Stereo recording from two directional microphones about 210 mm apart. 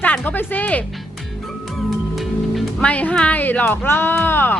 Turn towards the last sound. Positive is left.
turn(degrees=10)  # may be behind; listen again after turning